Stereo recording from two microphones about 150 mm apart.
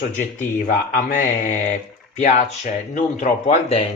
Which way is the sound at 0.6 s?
60° left (ahead or behind).